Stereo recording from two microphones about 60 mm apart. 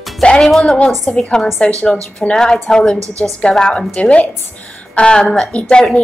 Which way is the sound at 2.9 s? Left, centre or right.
Right.